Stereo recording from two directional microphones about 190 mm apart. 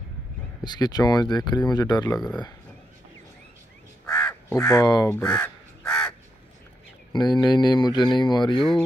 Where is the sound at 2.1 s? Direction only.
5° left (ahead or behind).